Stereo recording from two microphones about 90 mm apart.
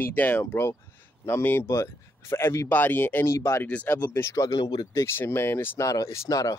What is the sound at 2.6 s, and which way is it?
Speech, 20° left (ahead or behind).